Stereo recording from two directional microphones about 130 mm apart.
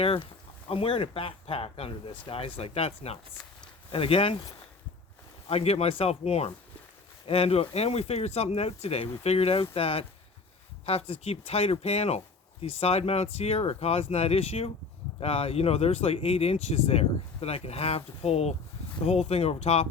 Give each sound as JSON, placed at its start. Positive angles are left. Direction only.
{"t": 0.0, "sound": "speech", "side_deg": 45}
{"t": 5.5, "sound": "speech", "side_deg": 50}